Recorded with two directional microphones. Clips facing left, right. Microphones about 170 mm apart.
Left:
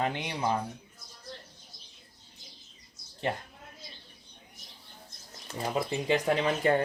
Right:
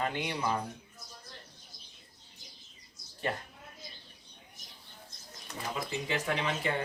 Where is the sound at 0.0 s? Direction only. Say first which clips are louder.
Left 2 dB; 20° left (ahead or behind).